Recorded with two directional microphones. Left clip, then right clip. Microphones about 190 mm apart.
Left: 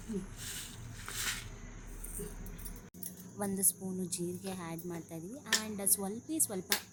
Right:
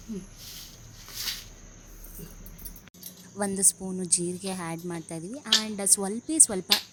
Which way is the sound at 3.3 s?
25° right (ahead or behind).